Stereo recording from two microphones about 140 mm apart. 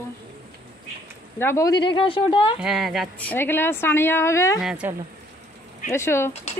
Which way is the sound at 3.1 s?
15° left (ahead or behind).